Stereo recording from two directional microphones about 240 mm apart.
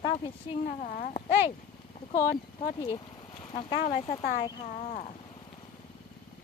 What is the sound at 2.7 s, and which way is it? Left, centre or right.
Speech, centre.